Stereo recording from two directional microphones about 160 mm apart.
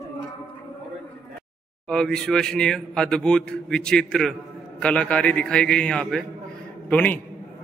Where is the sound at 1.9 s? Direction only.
5° left (ahead or behind).